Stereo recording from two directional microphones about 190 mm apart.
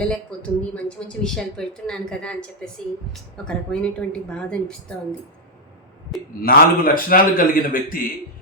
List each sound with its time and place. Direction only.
0.0 s a woman's voice: 5° left (ahead or behind)
6.4 s a man's voice: 50° left (ahead or behind)